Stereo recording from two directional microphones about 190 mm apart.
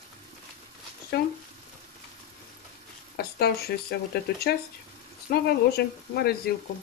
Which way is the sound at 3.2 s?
55° left (ahead or behind).